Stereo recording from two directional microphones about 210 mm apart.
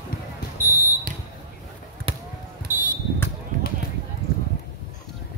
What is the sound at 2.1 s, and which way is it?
Basketball bounce, 25° right (ahead or behind).